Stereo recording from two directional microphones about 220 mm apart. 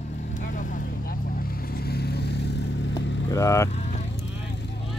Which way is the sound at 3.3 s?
15° left (ahead or behind).